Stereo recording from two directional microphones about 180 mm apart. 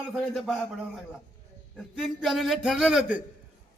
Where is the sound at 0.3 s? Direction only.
Centre (ahead or behind).